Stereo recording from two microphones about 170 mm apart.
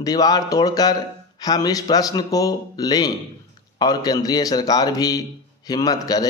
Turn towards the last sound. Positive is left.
turn(degrees=20)  # may be behind; listen again after turning